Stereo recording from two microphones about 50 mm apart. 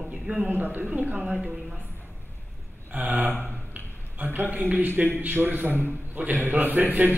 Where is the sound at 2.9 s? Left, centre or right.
Right.